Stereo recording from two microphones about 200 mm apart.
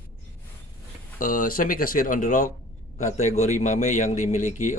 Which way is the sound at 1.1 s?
45° left (ahead or behind).